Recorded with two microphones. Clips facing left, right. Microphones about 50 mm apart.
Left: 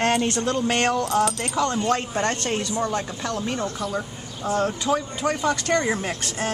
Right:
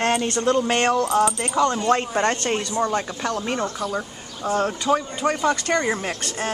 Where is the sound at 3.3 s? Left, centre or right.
Right.